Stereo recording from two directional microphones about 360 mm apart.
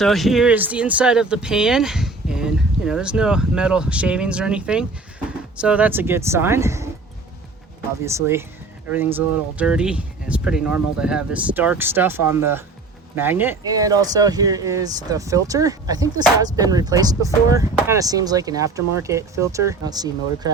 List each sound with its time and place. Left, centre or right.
0.0 s speech: centre
8.0 s speech: centre